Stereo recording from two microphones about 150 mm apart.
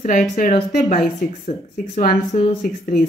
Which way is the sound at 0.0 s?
60° left (ahead or behind).